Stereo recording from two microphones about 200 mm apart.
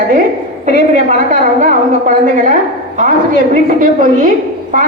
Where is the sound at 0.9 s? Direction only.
40° right (ahead or behind).